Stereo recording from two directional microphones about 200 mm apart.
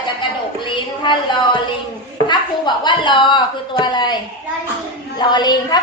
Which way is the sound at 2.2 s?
20° left (ahead or behind).